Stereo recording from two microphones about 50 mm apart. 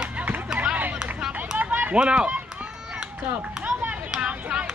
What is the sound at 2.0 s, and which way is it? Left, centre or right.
Speech, right.